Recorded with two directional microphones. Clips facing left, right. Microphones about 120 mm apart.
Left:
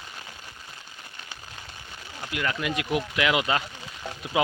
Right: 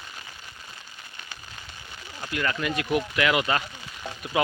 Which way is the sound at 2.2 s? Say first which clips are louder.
Right 1 dB; 10° left (ahead or behind).